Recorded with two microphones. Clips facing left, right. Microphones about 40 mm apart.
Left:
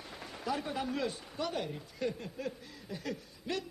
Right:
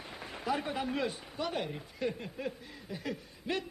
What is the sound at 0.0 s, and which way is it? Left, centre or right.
A man's voice, right.